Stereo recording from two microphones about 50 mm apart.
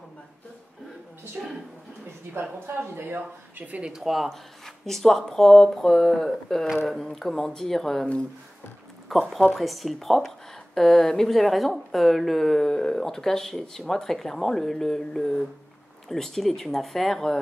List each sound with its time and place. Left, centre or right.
1.4 s speech: centre
2.6 s speech: right
3.8 s speech: centre
4.3 s speech: centre
9.1 s speech: centre